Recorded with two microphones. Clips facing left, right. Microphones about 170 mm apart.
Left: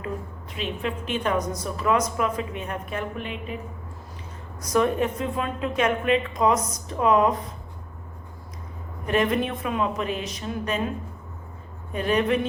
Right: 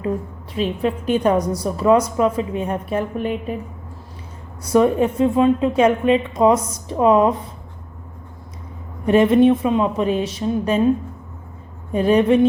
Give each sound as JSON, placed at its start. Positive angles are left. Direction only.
{"t": 0.5, "sound": "a woman's voice", "side_deg": -35}
{"t": 4.6, "sound": "a woman's voice", "side_deg": -30}
{"t": 9.0, "sound": "a woman's voice", "side_deg": -25}
{"t": 11.9, "sound": "a woman's voice", "side_deg": -30}